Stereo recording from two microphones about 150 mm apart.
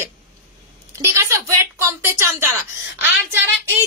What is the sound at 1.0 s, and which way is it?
Speech, 20° right (ahead or behind).